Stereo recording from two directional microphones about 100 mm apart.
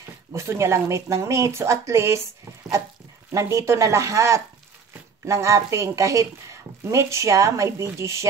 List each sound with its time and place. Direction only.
0.3 s a woman's voice: 25° right (ahead or behind)
3.3 s a woman's voice: 30° right (ahead or behind)